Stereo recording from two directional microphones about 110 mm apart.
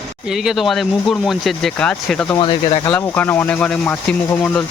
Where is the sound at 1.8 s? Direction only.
10° left (ahead or behind).